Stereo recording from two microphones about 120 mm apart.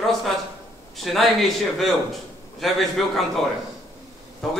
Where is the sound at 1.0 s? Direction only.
Centre (ahead or behind).